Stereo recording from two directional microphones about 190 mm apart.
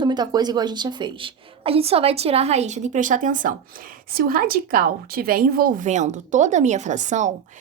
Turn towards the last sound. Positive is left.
turn(degrees=-40)  # may be behind; listen again after turning